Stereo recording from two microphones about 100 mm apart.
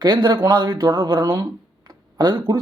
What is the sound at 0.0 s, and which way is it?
Speech, 45° right (ahead or behind).